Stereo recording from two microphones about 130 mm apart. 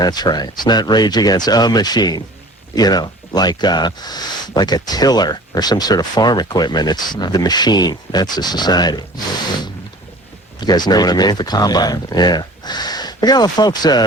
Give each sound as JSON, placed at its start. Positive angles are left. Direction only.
{"t": 0.0, "sound": "speech", "side_deg": 30}
{"t": 10.6, "sound": "speech", "side_deg": 35}